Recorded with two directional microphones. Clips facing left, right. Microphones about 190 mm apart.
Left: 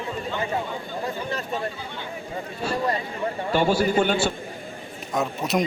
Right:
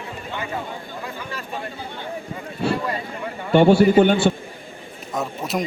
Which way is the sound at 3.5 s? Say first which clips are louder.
Right 8 dB; 60° right (ahead or behind).